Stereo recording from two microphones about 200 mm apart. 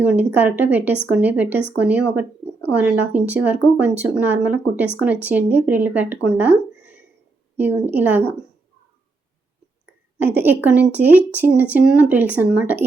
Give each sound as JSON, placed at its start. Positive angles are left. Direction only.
{"t": 0.0, "sound": "speech", "side_deg": -5}
{"t": 6.2, "sound": "a sound", "side_deg": -10}
{"t": 7.5, "sound": "speech", "side_deg": -10}
{"t": 10.2, "sound": "speech", "side_deg": -10}